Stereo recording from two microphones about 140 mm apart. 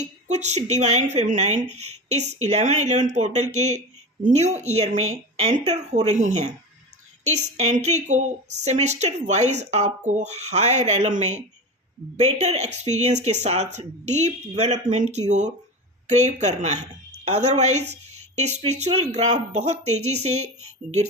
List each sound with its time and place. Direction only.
0.0 s a woman's voice: 55° right (ahead or behind)